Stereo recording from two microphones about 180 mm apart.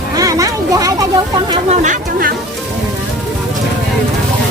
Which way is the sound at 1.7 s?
40° right (ahead or behind).